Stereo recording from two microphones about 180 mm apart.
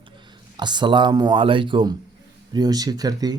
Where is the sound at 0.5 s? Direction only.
25° right (ahead or behind).